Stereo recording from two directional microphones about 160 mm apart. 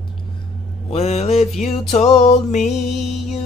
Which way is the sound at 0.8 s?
45° left (ahead or behind).